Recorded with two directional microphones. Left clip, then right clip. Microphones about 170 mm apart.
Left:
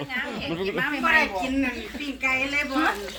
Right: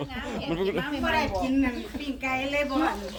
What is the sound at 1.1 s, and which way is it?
Speech, 70° right (ahead or behind).